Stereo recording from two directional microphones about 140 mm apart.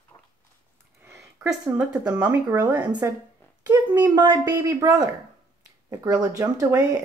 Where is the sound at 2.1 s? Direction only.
10° right (ahead or behind).